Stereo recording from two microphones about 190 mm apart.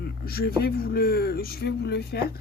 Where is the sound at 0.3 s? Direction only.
55° left (ahead or behind).